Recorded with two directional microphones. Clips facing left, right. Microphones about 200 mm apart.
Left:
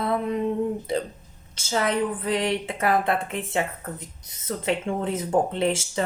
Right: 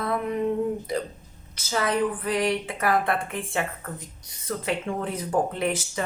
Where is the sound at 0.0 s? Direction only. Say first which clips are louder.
Left 2 dB; 30° left (ahead or behind).